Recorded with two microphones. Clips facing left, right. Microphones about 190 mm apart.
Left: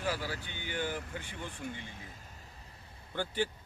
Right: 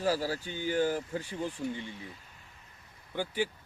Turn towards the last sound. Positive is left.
turn(degrees=-10)  # may be behind; listen again after turning